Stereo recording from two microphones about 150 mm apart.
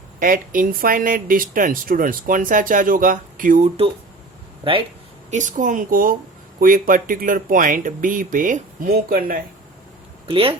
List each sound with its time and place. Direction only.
0.2 s speech: 65° right (ahead or behind)
3.6 s speech: 40° right (ahead or behind)
5.3 s speech: 55° right (ahead or behind); by 9.4 s 75° right (ahead or behind)
10.2 s speech: 35° right (ahead or behind)